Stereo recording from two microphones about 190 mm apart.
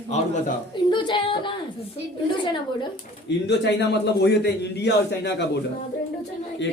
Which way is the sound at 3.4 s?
65° left (ahead or behind).